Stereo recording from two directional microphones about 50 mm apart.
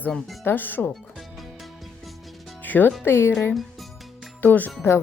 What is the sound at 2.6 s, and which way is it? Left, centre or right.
Speech, left.